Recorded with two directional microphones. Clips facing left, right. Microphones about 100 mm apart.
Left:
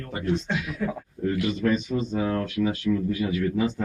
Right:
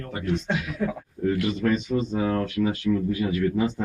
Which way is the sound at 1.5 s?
20° right (ahead or behind).